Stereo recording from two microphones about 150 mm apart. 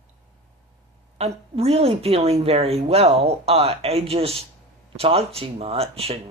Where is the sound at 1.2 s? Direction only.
45° right (ahead or behind).